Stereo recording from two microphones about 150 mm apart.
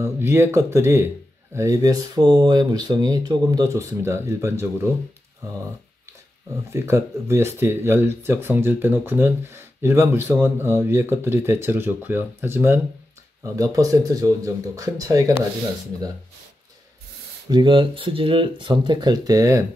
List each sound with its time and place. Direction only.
0.0 s speech: 15° right (ahead or behind)
6.7 s speech: 20° right (ahead or behind)
17.5 s speech: 30° right (ahead or behind)